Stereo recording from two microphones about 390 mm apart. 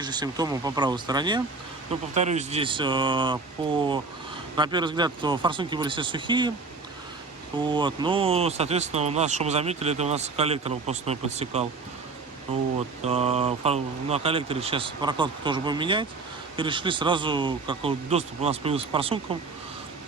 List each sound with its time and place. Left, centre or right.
0.0 s speech: centre
7.7 s speech: centre
13.1 s speech: centre